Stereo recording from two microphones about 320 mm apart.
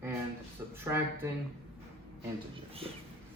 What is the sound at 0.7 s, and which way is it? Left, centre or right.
Speech, centre.